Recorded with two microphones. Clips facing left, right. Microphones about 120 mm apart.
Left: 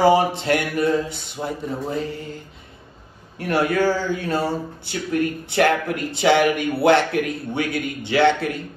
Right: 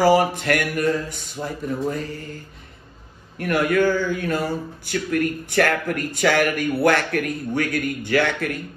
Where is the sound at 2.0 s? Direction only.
20° left (ahead or behind).